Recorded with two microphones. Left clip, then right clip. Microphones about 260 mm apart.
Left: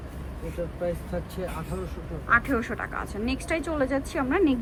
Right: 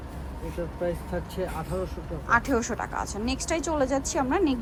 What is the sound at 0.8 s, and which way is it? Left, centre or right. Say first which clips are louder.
Speech: right 1 dB; centre.